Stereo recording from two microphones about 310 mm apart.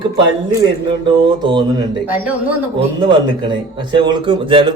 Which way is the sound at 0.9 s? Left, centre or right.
Centre.